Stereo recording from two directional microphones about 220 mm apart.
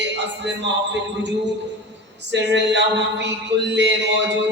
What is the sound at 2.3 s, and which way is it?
A man's voice, 50° right (ahead or behind).